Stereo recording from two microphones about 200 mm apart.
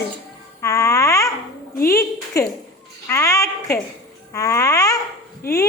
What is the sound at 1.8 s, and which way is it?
Speech, 15° left (ahead or behind).